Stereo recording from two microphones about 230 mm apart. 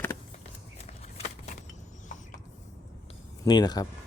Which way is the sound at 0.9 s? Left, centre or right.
Left.